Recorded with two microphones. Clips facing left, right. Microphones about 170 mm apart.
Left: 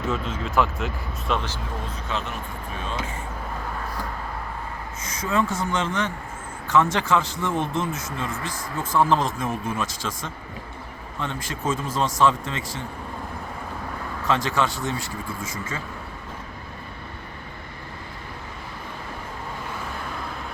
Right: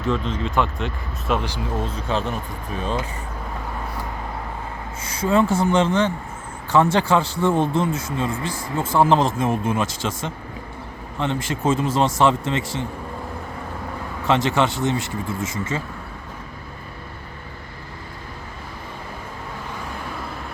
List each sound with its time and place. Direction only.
0.1 s speech: 5° left (ahead or behind)
1.9 s speech: 35° right (ahead or behind)
5.0 s speech: 30° right (ahead or behind)
14.3 s speech: 25° right (ahead or behind)